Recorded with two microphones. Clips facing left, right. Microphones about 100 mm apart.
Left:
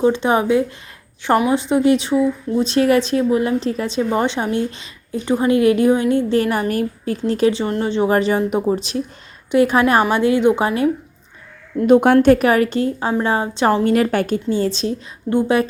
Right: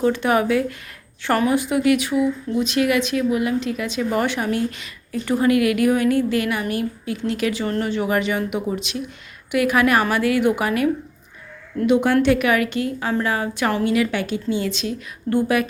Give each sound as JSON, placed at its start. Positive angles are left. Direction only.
{"t": 0.0, "sound": "speech", "side_deg": 20}
{"t": 11.9, "sound": "a woman's voice", "side_deg": 50}
{"t": 13.8, "sound": "a woman's voice", "side_deg": 45}
{"t": 14.5, "sound": "a woman's voice", "side_deg": 35}